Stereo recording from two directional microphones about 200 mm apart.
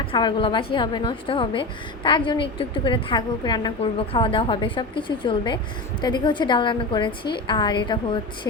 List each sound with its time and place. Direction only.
0.0 s a woman's voice: 25° left (ahead or behind)